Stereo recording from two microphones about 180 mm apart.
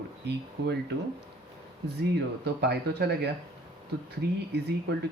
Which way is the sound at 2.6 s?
65° right (ahead or behind).